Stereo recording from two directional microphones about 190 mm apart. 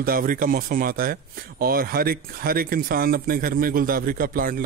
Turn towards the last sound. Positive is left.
turn(degrees=-50)  # may be behind; listen again after turning